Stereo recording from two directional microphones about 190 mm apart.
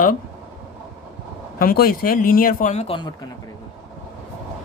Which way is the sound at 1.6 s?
50° left (ahead or behind).